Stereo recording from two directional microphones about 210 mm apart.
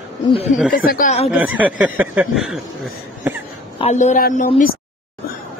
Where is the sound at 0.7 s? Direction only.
40° left (ahead or behind).